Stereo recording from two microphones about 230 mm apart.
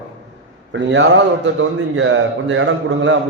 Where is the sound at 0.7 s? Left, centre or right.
Right.